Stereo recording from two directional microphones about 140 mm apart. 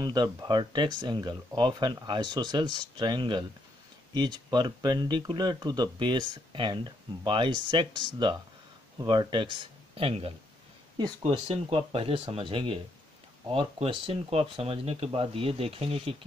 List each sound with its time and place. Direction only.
0.0 s speech: 30° right (ahead or behind)
8.9 s speech: 30° right (ahead or behind)